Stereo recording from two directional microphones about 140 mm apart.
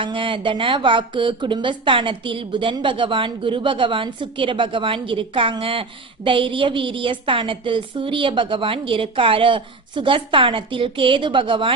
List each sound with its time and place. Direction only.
0.0 s speech: 35° right (ahead or behind)